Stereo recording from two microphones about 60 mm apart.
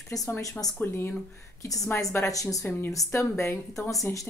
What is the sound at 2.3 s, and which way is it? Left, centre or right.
Speech, left.